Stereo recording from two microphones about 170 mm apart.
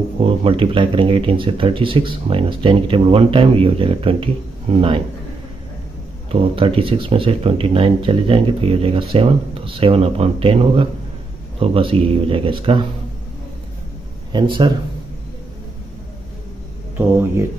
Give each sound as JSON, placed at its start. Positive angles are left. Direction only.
{"t": 0.2, "sound": "speech", "side_deg": -30}
{"t": 6.5, "sound": "speech", "side_deg": -30}
{"t": 14.3, "sound": "speech", "side_deg": -30}
{"t": 16.9, "sound": "speech", "side_deg": -15}